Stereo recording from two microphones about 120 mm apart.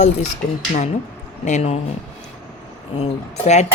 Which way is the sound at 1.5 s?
65° left (ahead or behind).